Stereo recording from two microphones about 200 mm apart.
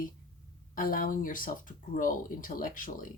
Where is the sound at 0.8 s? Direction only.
45° left (ahead or behind).